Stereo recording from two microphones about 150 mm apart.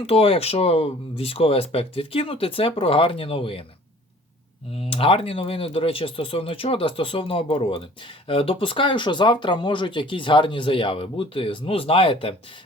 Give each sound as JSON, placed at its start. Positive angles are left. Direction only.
{"t": 0.0, "sound": "speech", "side_deg": 40}
{"t": 4.7, "sound": "speech", "side_deg": 40}